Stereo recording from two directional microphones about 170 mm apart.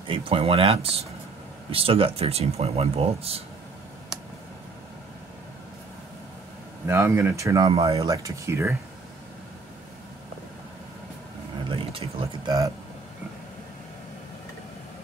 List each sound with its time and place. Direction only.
0.1 s speech: 35° right (ahead or behind)
6.9 s speech: 15° right (ahead or behind)
7.7 s speech: 35° right (ahead or behind)
8.0 s speech: 20° right (ahead or behind)
11.7 s speech: 30° right (ahead or behind)